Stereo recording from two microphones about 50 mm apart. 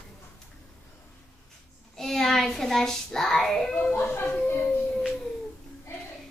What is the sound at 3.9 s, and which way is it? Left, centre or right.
Speech, left.